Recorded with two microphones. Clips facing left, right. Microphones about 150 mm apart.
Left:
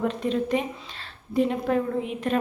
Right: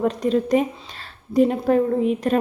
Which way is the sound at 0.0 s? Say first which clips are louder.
Right 5 dB; 40° right (ahead or behind).